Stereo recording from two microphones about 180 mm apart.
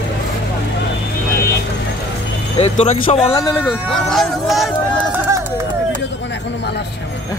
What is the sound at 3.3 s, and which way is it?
Music, 20° left (ahead or behind).